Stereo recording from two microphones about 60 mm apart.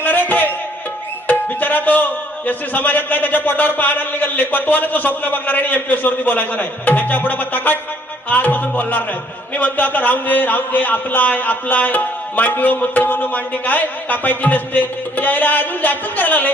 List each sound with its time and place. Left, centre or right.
0.0 s music: left
2.5 s a man's voice: left